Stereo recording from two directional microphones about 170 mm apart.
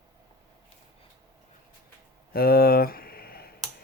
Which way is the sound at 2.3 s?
65° left (ahead or behind).